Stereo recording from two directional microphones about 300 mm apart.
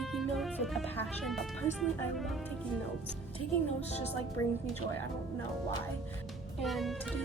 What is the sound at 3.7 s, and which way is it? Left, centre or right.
Speech, left.